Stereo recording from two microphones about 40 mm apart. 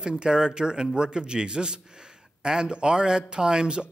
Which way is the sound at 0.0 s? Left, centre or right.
Centre.